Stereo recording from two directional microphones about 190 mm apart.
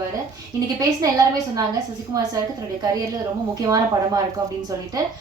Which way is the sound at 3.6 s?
20° right (ahead or behind).